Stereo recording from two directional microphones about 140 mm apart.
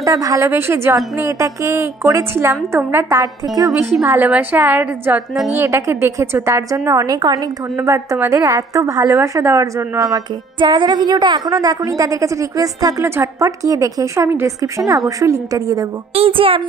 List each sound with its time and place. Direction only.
0.0 s a woman's voice: 25° right (ahead or behind)
16.2 s a child's voice: 40° right (ahead or behind)